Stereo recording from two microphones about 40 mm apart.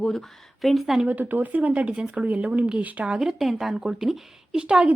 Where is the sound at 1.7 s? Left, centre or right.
Right.